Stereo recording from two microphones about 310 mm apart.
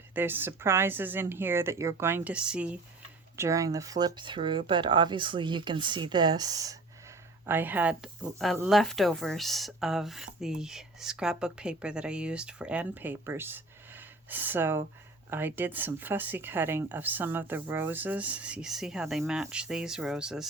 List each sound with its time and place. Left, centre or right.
0.1 s speech: centre